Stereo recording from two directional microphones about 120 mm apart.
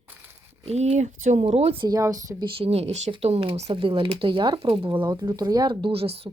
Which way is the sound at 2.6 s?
60° right (ahead or behind).